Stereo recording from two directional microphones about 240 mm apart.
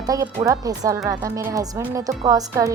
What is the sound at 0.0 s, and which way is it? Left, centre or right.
A woman's voice, centre.